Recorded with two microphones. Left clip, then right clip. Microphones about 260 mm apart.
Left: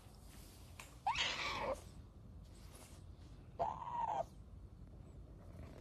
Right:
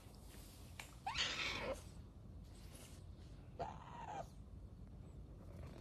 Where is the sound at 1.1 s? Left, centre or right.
Centre.